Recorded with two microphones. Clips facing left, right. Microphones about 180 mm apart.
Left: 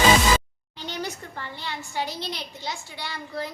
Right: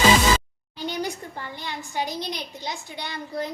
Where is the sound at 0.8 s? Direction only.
10° right (ahead or behind).